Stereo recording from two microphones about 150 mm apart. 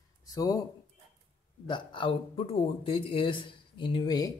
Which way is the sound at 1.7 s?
35° left (ahead or behind).